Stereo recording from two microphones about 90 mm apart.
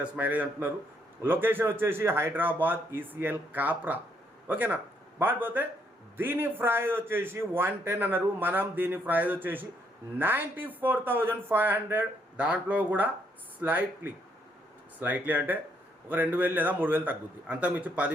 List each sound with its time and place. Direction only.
0.0 s a man's voice: 20° right (ahead or behind)